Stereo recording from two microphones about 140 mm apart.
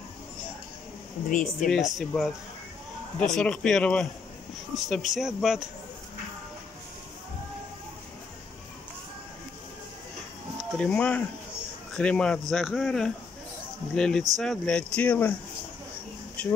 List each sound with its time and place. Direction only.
1.3 s speech: 70° left (ahead or behind)
1.7 s speech: centre (ahead or behind)
10.8 s speech: 10° left (ahead or behind)